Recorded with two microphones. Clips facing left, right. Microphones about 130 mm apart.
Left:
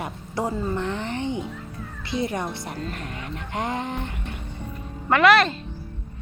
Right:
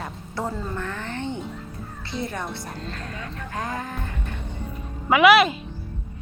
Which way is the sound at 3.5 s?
25° left (ahead or behind).